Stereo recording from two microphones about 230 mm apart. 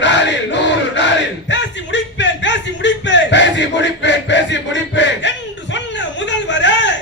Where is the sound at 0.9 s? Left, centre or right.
Left.